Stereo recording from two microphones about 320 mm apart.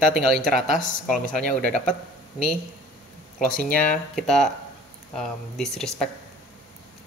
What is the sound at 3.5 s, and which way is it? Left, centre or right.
Speech, left.